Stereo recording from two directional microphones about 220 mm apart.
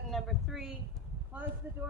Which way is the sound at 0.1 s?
Centre (ahead or behind).